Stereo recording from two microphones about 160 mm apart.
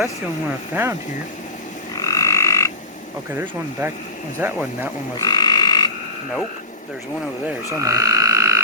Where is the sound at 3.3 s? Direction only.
15° right (ahead or behind).